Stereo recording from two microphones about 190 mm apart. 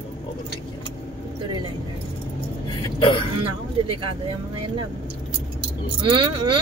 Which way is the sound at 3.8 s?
25° right (ahead or behind).